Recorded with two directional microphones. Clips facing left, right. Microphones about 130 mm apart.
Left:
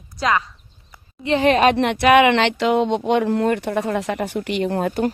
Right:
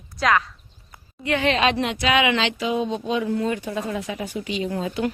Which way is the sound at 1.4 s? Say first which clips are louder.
Left 6 dB; 45° left (ahead or behind).